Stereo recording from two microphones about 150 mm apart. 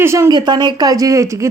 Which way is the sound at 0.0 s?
20° right (ahead or behind).